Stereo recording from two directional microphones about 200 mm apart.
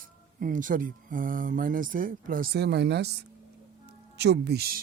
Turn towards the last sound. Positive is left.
turn(degrees=-50)  # may be behind; listen again after turning